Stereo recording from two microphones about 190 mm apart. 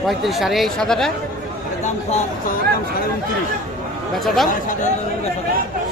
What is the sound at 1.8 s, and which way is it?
Speech, 40° left (ahead or behind).